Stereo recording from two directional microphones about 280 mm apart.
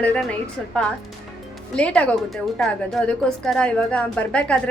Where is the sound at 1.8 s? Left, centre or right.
Centre.